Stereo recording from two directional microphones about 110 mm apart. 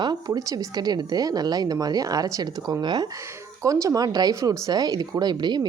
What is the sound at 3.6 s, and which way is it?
Speech, 30° right (ahead or behind).